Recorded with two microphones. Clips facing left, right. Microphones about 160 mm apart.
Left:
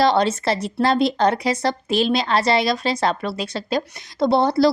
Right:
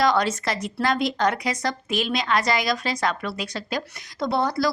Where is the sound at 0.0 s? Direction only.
25° left (ahead or behind).